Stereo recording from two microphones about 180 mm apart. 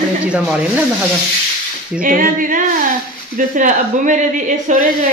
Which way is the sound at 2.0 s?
50° right (ahead or behind).